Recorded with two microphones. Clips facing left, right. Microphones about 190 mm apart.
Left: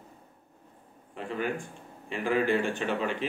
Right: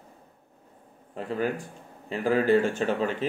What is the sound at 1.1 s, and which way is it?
Speech, 40° right (ahead or behind).